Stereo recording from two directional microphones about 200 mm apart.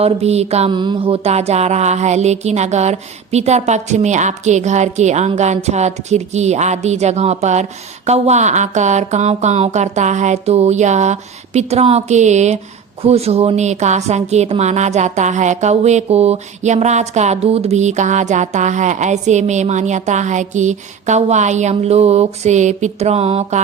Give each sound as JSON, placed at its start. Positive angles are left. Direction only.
{"t": 0.0, "sound": "mantra", "side_deg": -30}